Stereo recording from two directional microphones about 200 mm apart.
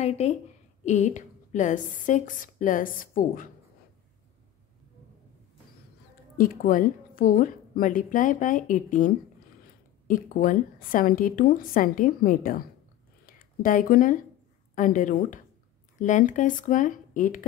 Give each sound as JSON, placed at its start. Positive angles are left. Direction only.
{"t": 0.0, "sound": "a woman's voice", "side_deg": 35}
{"t": 6.3, "sound": "a woman's voice", "side_deg": 45}